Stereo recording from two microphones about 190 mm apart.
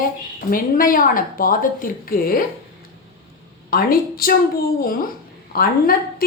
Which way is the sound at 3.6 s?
50° left (ahead or behind).